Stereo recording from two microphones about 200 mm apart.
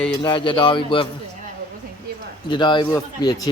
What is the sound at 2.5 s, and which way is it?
Speech, 25° left (ahead or behind).